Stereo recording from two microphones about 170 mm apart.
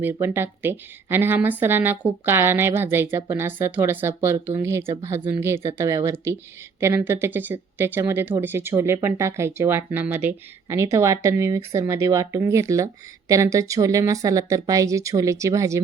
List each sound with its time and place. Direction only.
0.0 s speech: 15° right (ahead or behind)